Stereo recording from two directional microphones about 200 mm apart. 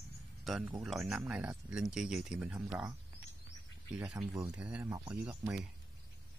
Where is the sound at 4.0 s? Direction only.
5° right (ahead or behind).